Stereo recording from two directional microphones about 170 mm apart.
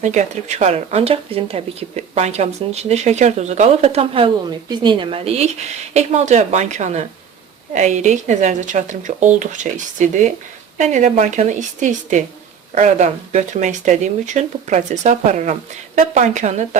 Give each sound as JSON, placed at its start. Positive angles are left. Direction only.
{"t": 0.0, "sound": "speech", "side_deg": -45}